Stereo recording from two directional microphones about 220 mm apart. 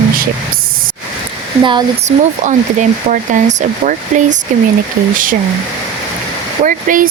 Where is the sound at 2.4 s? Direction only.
35° right (ahead or behind).